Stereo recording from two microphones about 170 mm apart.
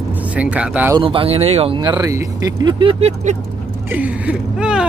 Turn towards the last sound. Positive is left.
turn(degrees=-5)  # may be behind; listen again after turning